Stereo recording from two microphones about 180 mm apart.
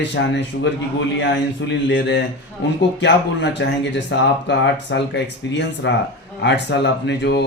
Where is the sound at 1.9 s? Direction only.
80° left.